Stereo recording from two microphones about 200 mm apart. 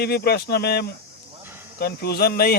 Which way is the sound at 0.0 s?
55° left (ahead or behind).